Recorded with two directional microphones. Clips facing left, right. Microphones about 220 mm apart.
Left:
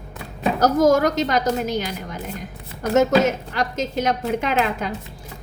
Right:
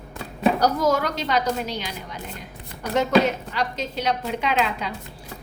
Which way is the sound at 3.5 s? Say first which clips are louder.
Left 4 dB; 45° left (ahead or behind).